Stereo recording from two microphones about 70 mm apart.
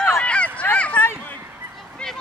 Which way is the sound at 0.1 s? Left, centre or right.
Centre.